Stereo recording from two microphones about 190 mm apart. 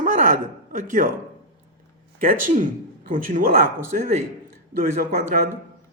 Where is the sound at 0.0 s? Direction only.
45° right (ahead or behind).